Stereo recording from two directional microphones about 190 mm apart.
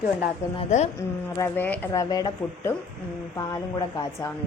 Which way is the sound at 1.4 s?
10° left (ahead or behind).